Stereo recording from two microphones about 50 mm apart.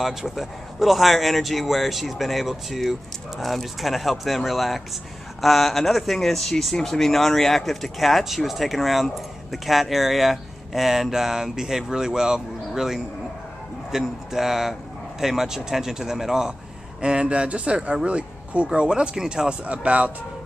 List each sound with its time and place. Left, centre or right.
0.0 s speech: centre; by 20.1 s right